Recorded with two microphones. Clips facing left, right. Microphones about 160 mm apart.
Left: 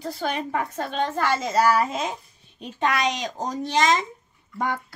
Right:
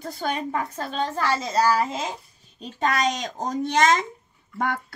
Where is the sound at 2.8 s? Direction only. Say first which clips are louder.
Even; 40° right (ahead or behind).